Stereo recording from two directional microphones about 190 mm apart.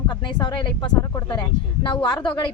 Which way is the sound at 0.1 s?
25° left (ahead or behind).